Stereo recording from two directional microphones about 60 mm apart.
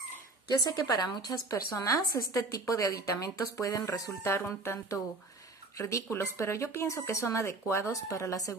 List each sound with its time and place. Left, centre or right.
0.5 s a woman's voice: left
4.2 s speech: left
5.8 s a woman's voice: left
6.0 s speech: left
7.9 s a woman's voice: left